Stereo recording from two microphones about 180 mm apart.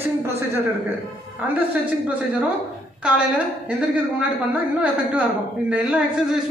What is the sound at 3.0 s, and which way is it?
A man's voice, 5° right (ahead or behind).